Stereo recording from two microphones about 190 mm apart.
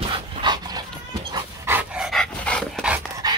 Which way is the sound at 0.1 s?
25° right (ahead or behind).